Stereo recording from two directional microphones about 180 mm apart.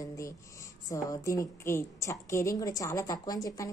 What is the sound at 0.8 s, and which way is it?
A woman's voice, 20° left (ahead or behind).